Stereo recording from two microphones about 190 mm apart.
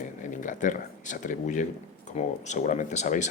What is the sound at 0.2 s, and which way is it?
Speech, 40° left (ahead or behind).